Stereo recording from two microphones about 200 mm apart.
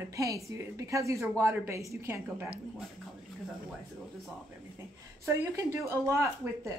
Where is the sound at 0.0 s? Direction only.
15° right (ahead or behind).